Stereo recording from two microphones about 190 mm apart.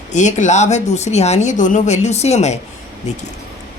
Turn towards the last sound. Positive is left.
turn(degrees=40)  # may be behind; listen again after turning